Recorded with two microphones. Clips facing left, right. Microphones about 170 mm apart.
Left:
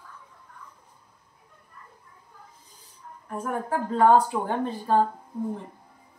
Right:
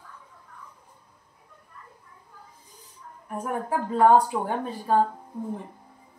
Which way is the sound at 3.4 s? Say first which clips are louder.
Even; 10° right (ahead or behind).